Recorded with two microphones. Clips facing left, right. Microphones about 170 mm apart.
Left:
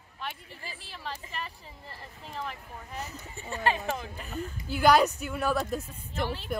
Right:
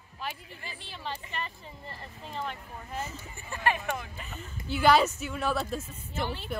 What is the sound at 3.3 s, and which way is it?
Speech, 25° left (ahead or behind).